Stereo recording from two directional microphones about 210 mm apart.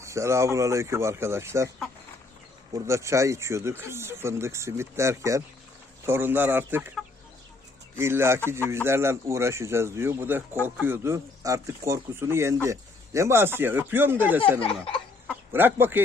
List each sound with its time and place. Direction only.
0.0 s speech: 15° right (ahead or behind)
2.7 s speech: 15° right (ahead or behind)